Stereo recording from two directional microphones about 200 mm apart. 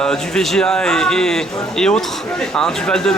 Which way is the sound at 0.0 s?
5° left (ahead or behind).